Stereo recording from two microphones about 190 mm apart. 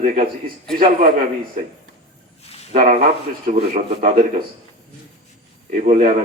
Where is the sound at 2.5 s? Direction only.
35° left (ahead or behind).